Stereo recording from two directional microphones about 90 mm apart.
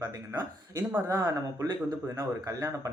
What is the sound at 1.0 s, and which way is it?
Speech, 35° right (ahead or behind).